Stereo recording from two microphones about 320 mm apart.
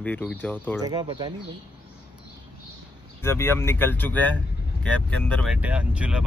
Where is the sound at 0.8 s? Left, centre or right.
Centre.